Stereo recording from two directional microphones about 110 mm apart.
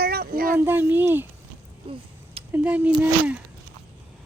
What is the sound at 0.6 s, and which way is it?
Speech, 20° right (ahead or behind).